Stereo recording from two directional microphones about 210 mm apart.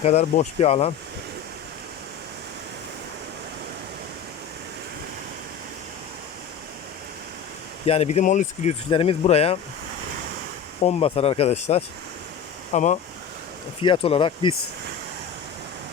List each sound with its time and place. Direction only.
0.0 s speech: 30° left (ahead or behind)
7.9 s speech: 30° left (ahead or behind)
10.8 s speech: 30° left (ahead or behind)
13.8 s speech: 25° left (ahead or behind)